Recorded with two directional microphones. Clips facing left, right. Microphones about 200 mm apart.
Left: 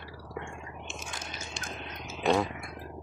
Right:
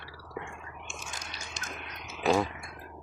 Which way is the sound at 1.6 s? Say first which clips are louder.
Left 2 dB; 25° left (ahead or behind).